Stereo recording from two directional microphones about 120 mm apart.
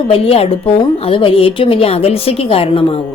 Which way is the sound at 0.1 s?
55° left (ahead or behind).